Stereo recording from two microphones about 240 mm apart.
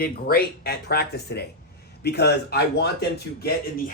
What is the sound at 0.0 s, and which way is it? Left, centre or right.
Speech, left.